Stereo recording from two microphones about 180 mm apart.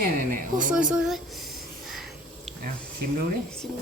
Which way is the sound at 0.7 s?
5° right (ahead or behind).